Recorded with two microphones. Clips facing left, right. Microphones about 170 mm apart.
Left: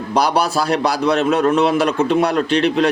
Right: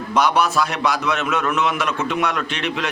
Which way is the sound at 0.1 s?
35° left (ahead or behind).